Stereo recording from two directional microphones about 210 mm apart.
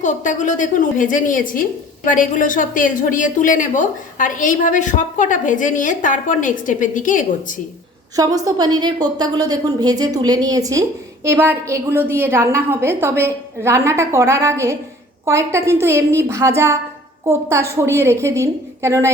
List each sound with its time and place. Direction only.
0.0 s a woman's voice: 35° left (ahead or behind)
8.1 s a woman's voice: 15° right (ahead or behind)